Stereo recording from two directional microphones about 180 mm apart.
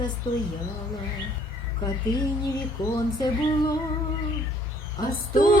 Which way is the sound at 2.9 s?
20° left (ahead or behind).